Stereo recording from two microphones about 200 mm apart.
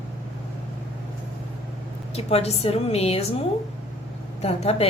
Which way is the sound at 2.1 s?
30° left (ahead or behind).